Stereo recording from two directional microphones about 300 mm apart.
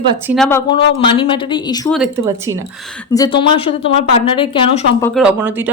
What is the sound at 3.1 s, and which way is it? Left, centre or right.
A woman's voice, centre.